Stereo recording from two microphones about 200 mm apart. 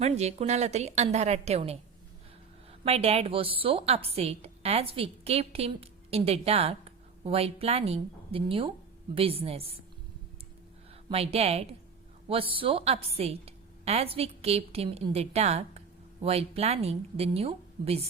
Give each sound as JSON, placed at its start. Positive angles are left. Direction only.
{"t": 0.0, "sound": "a woman's voice", "side_deg": -35}
{"t": 2.8, "sound": "a woman's voice", "side_deg": -30}
{"t": 11.1, "sound": "a woman's voice", "side_deg": -30}